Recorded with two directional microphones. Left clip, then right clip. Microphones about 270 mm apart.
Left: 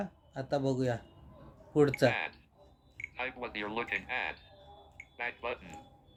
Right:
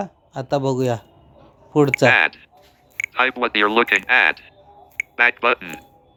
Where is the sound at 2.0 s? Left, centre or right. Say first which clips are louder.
Right 15 dB; right.